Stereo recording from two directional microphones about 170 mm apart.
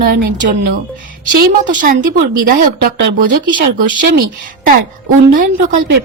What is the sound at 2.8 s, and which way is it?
Speech, 60° right (ahead or behind).